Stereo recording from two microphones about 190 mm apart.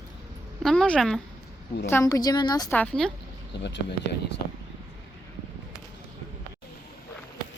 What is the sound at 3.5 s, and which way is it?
Speech, 65° left (ahead or behind).